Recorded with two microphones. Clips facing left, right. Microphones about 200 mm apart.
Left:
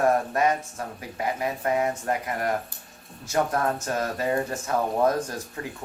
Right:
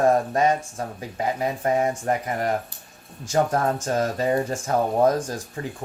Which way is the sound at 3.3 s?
30° right (ahead or behind).